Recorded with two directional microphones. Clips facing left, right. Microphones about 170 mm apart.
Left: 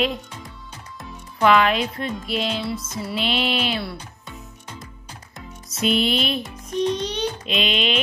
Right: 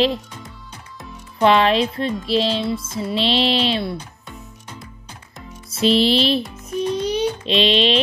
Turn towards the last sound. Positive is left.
turn(degrees=-30)  # may be behind; listen again after turning